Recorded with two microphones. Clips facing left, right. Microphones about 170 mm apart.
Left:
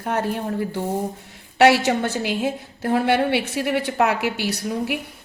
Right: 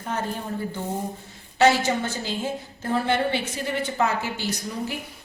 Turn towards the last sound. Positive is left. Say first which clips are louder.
# left 5 dB
turn(degrees=70)  # may be behind; listen again after turning